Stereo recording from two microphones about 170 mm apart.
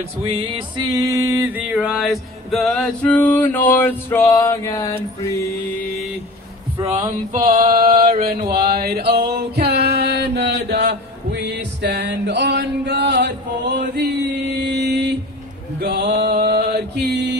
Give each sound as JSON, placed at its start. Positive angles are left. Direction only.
{"t": 0.2, "sound": "music", "side_deg": -30}
{"t": 1.0, "sound": "music", "side_deg": -15}
{"t": 7.3, "sound": "male singing", "side_deg": -55}
{"t": 13.2, "sound": "chant", "side_deg": -80}
{"t": 14.6, "sound": "mantra", "side_deg": -85}
{"t": 15.8, "sound": "mantra", "side_deg": -65}